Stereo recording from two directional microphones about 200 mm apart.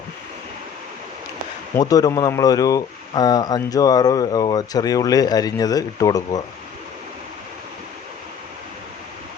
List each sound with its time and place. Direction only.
1.7 s speech: 20° left (ahead or behind)